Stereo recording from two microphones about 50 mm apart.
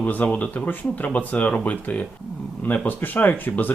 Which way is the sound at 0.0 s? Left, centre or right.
Left.